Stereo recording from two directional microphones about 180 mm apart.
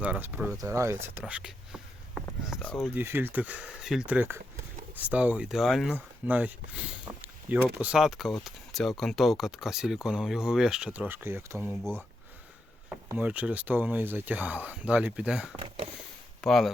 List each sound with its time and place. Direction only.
0.0 s speech: 10° right (ahead or behind)
1.0 s whispering: 10° right (ahead or behind)
2.4 s speech: centre (ahead or behind)
2.9 s speech: 10° right (ahead or behind)
11.8 s speech: 5° left (ahead or behind)
13.1 s speech: 10° right (ahead or behind)